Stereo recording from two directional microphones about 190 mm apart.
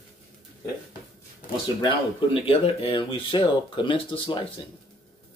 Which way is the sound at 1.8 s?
25° left (ahead or behind).